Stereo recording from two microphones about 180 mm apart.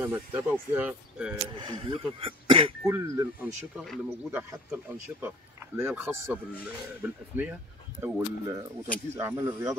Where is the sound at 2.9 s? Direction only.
15° right (ahead or behind).